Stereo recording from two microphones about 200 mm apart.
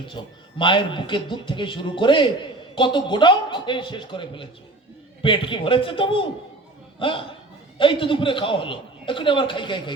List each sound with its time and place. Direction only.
0.6 s a man's voice: 25° left (ahead or behind)